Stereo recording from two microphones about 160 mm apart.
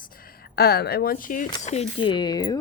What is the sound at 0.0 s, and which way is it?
Speech, 65° left (ahead or behind).